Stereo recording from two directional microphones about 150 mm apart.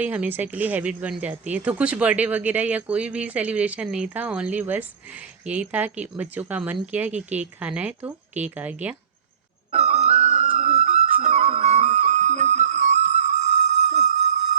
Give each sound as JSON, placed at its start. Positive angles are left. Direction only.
{"t": 0.0, "sound": "speech", "side_deg": -10}
{"t": 9.7, "sound": "music", "side_deg": -50}